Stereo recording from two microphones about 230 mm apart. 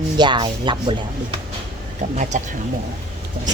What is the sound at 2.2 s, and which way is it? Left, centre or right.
Speech, right.